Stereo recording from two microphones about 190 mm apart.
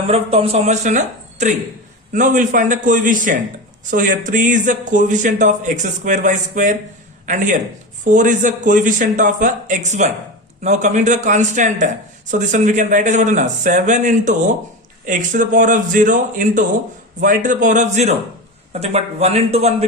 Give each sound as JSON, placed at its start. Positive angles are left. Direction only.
{"t": 0.1, "sound": "speech", "side_deg": -30}